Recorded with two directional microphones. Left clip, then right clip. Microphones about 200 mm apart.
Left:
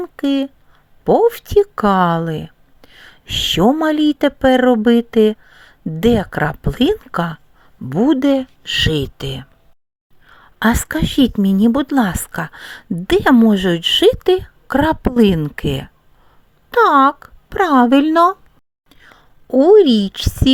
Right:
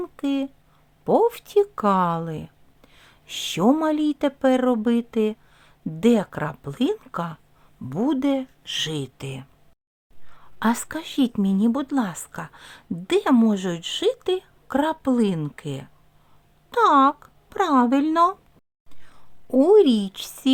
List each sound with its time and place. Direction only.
0.0 s a sound: 20° left (ahead or behind)
1.0 s a woman's voice: 20° left (ahead or behind)
18.9 s whispering: 25° left (ahead or behind)